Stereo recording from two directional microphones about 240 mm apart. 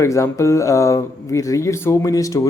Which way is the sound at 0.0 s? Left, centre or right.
Centre.